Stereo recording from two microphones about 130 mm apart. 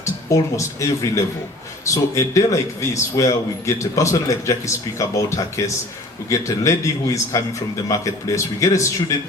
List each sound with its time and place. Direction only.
0.0 s a man's voice: 25° left (ahead or behind)